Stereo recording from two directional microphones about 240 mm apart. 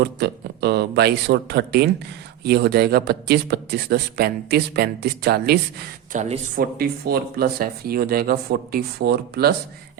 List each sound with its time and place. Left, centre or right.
0.0 s speech: right
6.1 s speech: right
6.7 s speech: right